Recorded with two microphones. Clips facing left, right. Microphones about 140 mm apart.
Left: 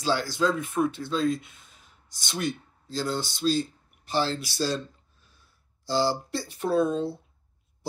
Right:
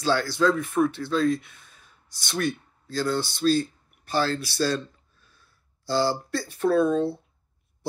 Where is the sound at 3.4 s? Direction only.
55° right (ahead or behind).